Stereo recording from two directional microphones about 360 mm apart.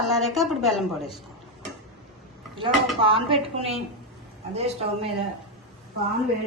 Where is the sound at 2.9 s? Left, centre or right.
Centre.